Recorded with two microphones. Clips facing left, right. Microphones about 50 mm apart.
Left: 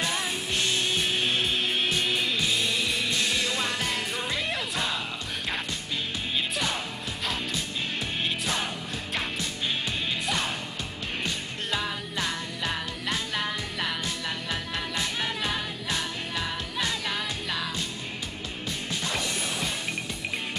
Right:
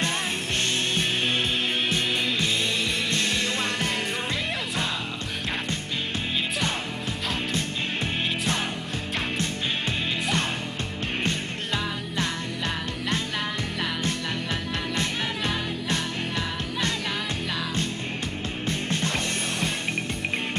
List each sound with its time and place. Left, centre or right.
0.7 s music: centre
10.2 s music: centre
11.7 s music: centre
15.4 s music: centre
18.7 s music: right